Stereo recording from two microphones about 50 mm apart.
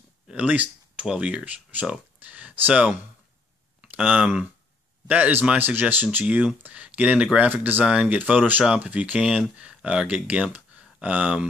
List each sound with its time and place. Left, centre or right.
0.4 s speech: right
6.2 s speech: right
7.8 s speech: right
8.2 s speech: right